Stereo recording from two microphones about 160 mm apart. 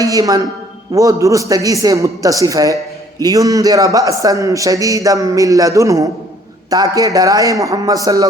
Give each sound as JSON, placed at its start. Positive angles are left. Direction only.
{"t": 0.0, "sound": "a man's voice", "side_deg": -20}